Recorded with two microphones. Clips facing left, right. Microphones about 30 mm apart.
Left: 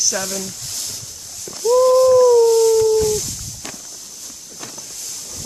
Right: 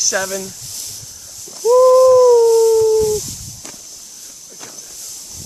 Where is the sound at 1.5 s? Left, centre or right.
Left.